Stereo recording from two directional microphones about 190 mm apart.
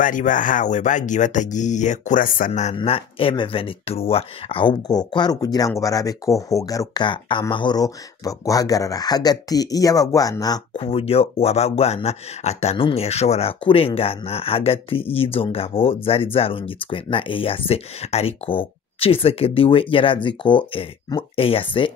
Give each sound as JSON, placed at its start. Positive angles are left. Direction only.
{"t": 0.0, "sound": "speech", "side_deg": 45}